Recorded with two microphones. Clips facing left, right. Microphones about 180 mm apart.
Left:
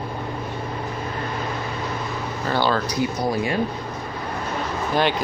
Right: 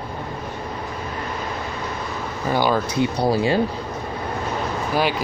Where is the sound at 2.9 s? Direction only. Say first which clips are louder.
Right 3 dB; 30° right (ahead or behind).